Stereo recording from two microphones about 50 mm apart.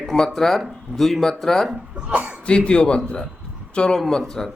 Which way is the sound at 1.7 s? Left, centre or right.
Right.